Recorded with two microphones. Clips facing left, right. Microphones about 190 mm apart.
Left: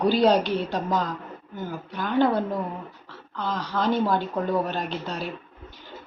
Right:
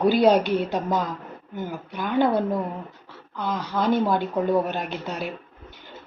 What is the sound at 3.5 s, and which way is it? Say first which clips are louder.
A woman's voice: right 2 dB; 10° right (ahead or behind).